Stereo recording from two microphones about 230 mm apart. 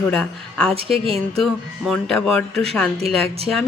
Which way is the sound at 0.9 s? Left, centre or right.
Right.